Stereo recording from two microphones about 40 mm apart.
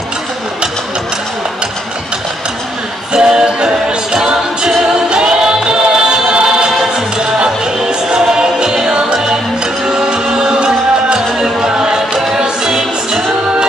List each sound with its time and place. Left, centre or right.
3.1 s music: centre